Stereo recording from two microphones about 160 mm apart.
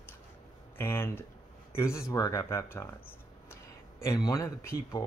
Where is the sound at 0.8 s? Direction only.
15° left (ahead or behind).